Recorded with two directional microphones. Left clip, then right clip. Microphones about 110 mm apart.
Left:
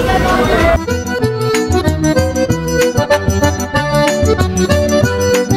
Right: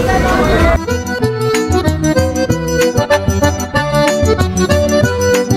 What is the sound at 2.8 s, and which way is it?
Music, centre (ahead or behind).